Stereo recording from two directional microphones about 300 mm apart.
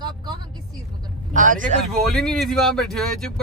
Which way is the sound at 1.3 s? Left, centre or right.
Right.